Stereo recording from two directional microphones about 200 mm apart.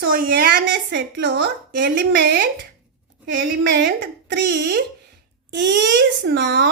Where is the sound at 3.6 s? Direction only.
55° right (ahead or behind).